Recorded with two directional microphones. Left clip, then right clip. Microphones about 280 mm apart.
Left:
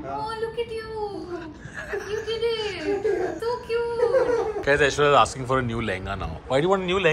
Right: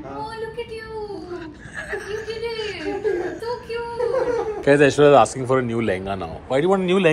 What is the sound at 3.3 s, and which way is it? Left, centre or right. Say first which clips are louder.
Whimper: left 1 dB; centre.